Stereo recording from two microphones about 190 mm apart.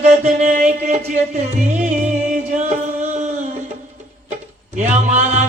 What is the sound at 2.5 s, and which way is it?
Singing, 40° right (ahead or behind).